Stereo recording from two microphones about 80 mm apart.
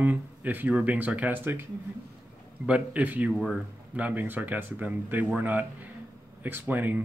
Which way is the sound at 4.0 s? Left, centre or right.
Centre.